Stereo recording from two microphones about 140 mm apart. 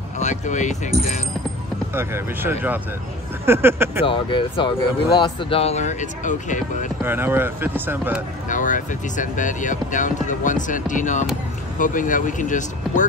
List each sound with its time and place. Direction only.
0.2 s speech: 60° left (ahead or behind)
2.0 s speech: 15° right (ahead or behind)
4.0 s speech: 35° left (ahead or behind); by 6.9 s 65° left (ahead or behind)
7.0 s speech: 15° right (ahead or behind)
8.5 s speech: 65° left (ahead or behind)